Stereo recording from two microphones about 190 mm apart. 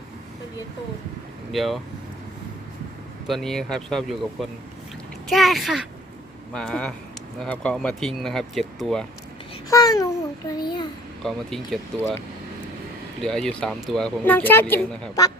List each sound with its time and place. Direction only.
1.5 s speech: centre (ahead or behind)
3.2 s speech: centre (ahead or behind)
9.6 s a child's voice: 20° left (ahead or behind)
11.2 s speech: centre (ahead or behind)
13.2 s speech: 5° left (ahead or behind)